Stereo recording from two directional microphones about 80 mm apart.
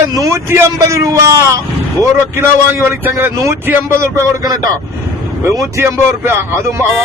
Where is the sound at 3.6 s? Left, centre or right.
Right.